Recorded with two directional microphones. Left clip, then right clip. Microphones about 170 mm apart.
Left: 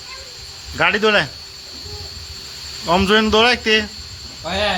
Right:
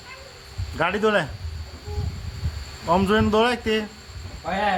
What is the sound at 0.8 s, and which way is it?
Speech, 10° left (ahead or behind).